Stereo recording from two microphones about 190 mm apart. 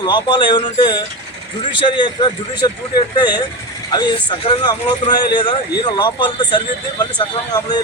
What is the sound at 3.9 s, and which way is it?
Speech, 25° left (ahead or behind).